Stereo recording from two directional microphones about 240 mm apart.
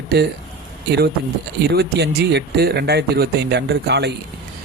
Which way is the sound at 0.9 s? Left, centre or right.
Right.